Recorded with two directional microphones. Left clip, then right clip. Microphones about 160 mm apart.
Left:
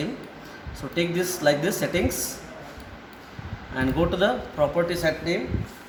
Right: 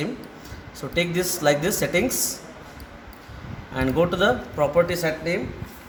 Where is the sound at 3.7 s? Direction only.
75° right (ahead or behind).